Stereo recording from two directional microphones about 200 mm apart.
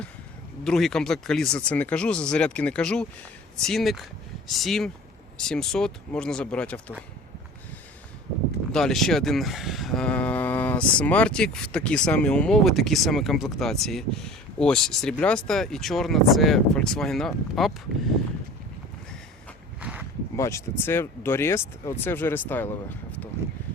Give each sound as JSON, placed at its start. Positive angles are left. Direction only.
{"t": 0.6, "sound": "speech", "side_deg": 0}
{"t": 8.7, "sound": "speech", "side_deg": 0}
{"t": 19.8, "sound": "a sound", "side_deg": -5}
{"t": 20.3, "sound": "speech", "side_deg": 15}